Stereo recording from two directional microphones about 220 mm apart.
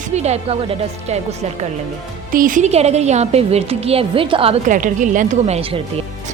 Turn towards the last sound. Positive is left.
turn(degrees=-30)  # may be behind; listen again after turning